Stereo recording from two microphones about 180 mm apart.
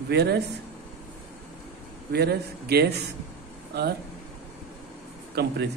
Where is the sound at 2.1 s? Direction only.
60° right (ahead or behind).